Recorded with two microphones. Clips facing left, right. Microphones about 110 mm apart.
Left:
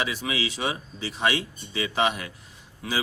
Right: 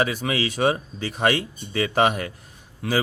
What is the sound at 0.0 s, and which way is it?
Speech, 50° right (ahead or behind).